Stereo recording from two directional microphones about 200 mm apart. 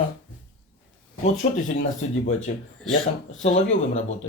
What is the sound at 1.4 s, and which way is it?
Speech, 40° left (ahead or behind).